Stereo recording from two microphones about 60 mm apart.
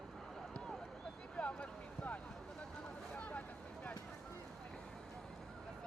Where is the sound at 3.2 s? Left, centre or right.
Left.